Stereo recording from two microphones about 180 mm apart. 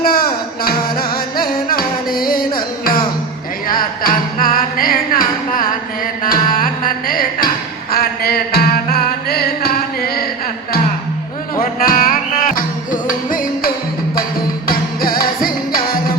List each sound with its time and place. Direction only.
0.0 s music: 55° left (ahead or behind)
3.7 s music: 55° left (ahead or behind)
11.5 s music: 50° left (ahead or behind)
14.7 s music: 55° left (ahead or behind)